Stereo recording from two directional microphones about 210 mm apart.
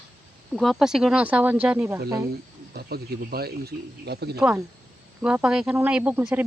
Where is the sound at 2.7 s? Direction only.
45° right (ahead or behind).